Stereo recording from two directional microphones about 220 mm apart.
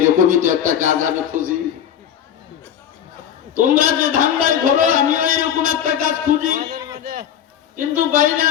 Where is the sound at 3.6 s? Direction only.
40° right (ahead or behind).